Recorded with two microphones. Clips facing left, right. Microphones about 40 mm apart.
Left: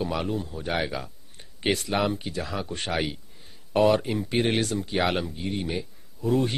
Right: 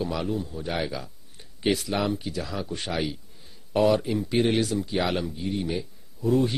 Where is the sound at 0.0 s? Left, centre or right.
Centre.